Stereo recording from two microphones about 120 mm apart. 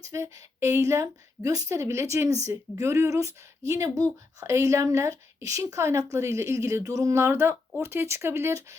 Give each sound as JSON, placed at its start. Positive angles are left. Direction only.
{"t": 0.0, "sound": "a woman's voice", "side_deg": -25}